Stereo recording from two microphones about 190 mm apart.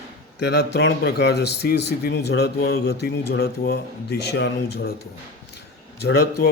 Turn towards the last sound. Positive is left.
turn(degrees=60)  # may be behind; listen again after turning